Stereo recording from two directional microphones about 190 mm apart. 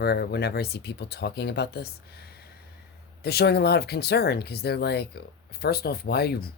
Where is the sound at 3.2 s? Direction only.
60° left (ahead or behind).